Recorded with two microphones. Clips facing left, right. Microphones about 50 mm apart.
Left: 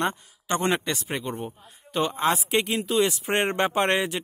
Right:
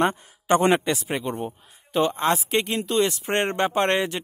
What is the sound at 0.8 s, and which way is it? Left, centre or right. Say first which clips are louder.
A man's voice: right 4 dB; centre.